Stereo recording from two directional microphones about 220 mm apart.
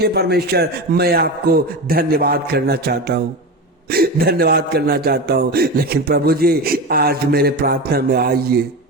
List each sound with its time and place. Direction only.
0.0 s speech: 45° right (ahead or behind)